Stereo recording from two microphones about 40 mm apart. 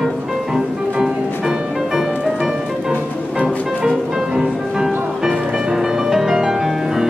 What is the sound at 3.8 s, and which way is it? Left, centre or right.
Music, centre.